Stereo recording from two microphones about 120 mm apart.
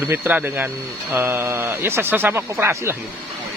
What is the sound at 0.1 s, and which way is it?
Speech, 15° right (ahead or behind).